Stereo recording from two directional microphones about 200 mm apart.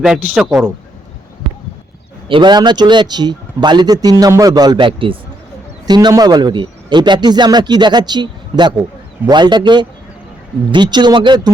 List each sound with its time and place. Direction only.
0.0 s speech: 5° right (ahead or behind)
2.3 s speech: 20° right (ahead or behind)